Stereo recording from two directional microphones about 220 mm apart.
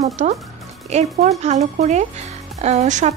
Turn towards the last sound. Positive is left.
turn(degrees=-30)  # may be behind; listen again after turning